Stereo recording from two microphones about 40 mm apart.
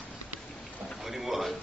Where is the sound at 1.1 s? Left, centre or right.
Centre.